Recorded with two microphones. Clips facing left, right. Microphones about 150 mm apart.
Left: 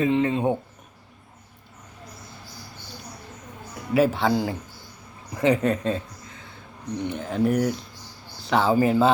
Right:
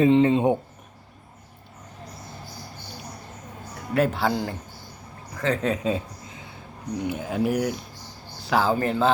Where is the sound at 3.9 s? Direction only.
Centre (ahead or behind).